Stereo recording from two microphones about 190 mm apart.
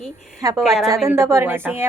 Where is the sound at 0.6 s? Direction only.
Centre (ahead or behind).